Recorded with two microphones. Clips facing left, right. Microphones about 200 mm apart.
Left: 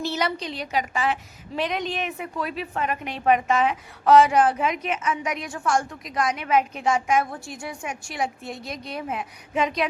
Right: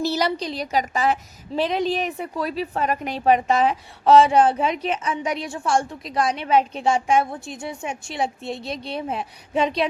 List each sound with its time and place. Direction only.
0.0 s a woman's voice: 35° right (ahead or behind)